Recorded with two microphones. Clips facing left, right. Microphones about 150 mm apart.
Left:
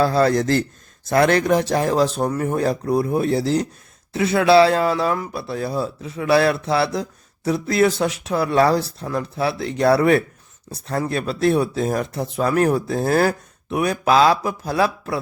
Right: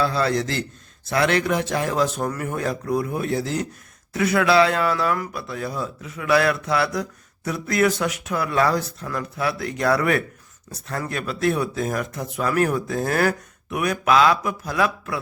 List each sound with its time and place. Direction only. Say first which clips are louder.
0.0 s a man's voice: left 5 dB; 45° left (ahead or behind)